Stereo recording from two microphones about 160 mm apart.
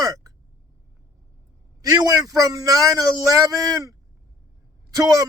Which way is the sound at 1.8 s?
20° right (ahead or behind).